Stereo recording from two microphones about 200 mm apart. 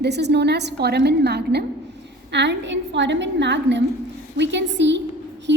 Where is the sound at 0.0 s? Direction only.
55° right (ahead or behind).